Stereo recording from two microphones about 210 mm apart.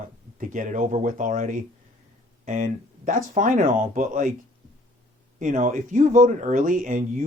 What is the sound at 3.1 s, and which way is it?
Speech, 40° right (ahead or behind).